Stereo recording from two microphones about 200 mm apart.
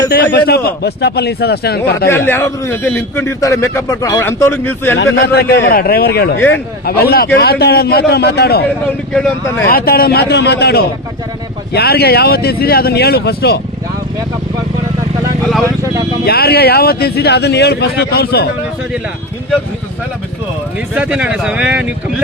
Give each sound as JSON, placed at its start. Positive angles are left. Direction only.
{"t": 0.1, "sound": "speech", "side_deg": 50}
{"t": 2.0, "sound": "a man's voice", "side_deg": 10}
{"t": 5.2, "sound": "speech", "side_deg": 55}
{"t": 9.6, "sound": "speech", "side_deg": 50}
{"t": 15.6, "sound": "vehicle", "side_deg": -15}
{"t": 16.2, "sound": "speech", "side_deg": 50}
{"t": 20.9, "sound": "speech", "side_deg": -5}